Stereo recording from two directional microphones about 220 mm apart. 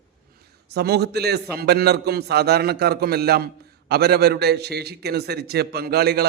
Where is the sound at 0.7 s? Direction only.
50° right (ahead or behind).